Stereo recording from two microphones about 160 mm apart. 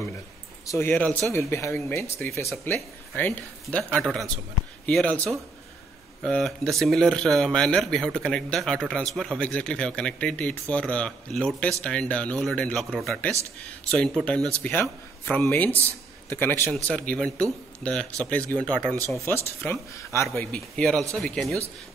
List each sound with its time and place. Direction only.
0.7 s speech: 15° left (ahead or behind)